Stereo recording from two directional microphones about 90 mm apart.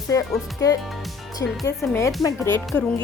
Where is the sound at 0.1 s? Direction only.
35° left (ahead or behind).